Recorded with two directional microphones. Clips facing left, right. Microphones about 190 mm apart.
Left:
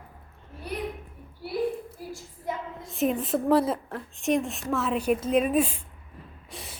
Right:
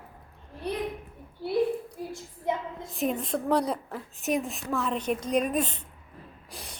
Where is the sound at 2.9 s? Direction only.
Centre (ahead or behind).